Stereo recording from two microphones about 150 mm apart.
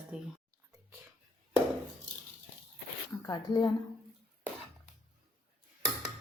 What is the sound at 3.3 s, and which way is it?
Speech, 25° left (ahead or behind).